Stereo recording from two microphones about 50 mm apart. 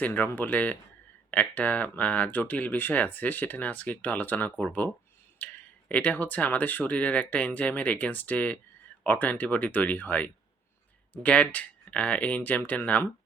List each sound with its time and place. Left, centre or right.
0.0 s speech: left